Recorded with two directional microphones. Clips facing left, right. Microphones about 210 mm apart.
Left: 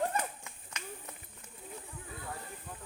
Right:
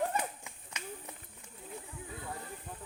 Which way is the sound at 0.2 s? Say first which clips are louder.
Even; 15° right (ahead or behind).